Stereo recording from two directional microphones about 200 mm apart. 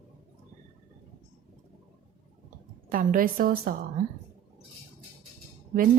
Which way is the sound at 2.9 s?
45° right (ahead or behind).